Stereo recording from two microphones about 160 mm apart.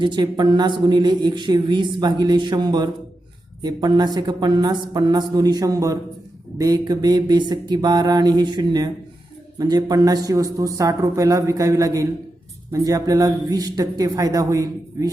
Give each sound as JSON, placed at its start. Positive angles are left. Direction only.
{"t": 0.0, "sound": "speech", "side_deg": -30}